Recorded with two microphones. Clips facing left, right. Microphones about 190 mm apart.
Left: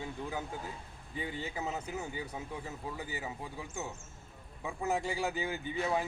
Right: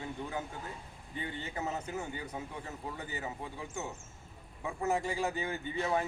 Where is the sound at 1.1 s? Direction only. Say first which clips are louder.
Left 1 dB; 10° left (ahead or behind).